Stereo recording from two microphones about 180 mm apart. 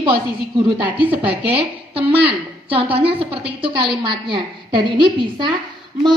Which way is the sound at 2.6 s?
30° right (ahead or behind).